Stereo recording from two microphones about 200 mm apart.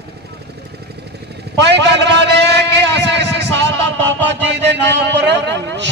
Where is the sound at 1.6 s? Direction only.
60° right (ahead or behind).